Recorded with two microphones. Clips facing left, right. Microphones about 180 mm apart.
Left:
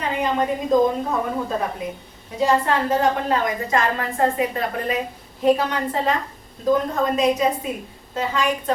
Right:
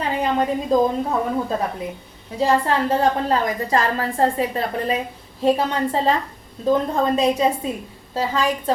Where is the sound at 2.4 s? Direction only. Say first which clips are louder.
Right 1 dB; 35° right (ahead or behind).